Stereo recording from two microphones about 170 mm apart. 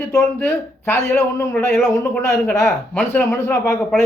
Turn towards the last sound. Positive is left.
turn(degrees=15)  # may be behind; listen again after turning